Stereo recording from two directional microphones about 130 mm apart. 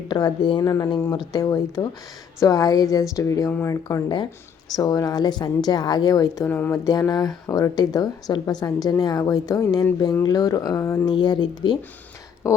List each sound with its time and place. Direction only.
0.1 s a woman's voice: 35° left (ahead or behind)
6.5 s speech: 15° left (ahead or behind)
7.1 s a woman's voice: 25° left (ahead or behind)
11.0 s a woman's voice: 35° left (ahead or behind)